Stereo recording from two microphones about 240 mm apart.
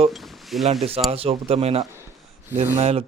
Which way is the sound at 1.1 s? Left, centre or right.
Right.